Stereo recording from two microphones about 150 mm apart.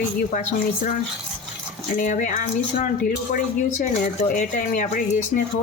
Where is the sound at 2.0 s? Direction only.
60° left (ahead or behind).